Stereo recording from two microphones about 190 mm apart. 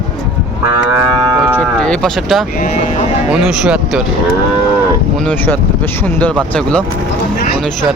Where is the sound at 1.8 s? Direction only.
5° left (ahead or behind).